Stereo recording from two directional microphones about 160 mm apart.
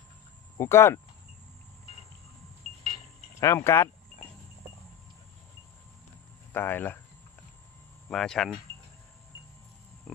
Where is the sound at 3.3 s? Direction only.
15° left (ahead or behind).